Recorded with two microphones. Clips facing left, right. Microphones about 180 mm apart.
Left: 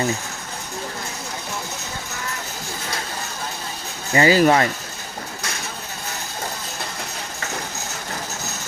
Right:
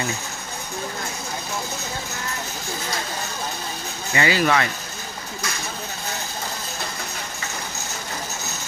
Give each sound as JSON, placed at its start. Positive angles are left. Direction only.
{"t": 4.1, "sound": "speech", "side_deg": 40}